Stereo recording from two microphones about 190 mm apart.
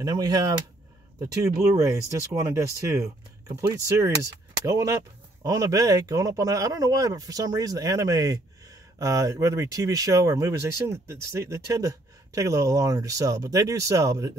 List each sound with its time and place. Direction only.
0.0 s speech: 20° right (ahead or behind)